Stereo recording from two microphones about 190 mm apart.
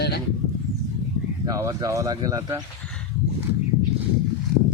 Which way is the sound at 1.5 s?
15° right (ahead or behind).